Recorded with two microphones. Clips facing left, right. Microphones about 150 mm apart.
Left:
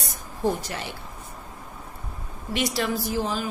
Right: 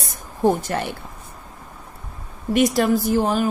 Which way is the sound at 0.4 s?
50° right (ahead or behind).